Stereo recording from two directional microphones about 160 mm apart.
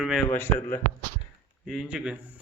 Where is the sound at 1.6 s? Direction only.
Centre (ahead or behind).